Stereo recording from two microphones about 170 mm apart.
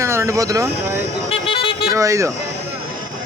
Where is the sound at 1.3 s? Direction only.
30° left (ahead or behind).